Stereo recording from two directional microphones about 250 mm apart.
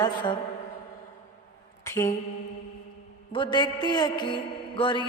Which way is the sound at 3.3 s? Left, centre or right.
Centre.